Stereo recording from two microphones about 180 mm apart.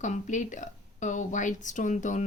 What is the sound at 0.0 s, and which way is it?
Speech, 45° left (ahead or behind).